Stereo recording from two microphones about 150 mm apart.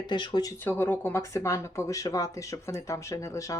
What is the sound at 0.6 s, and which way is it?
Speech, 15° left (ahead or behind).